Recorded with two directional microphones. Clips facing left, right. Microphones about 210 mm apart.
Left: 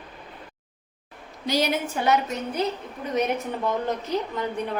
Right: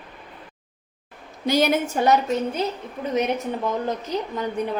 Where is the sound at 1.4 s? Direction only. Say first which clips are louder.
Right 4 dB; 50° right (ahead or behind).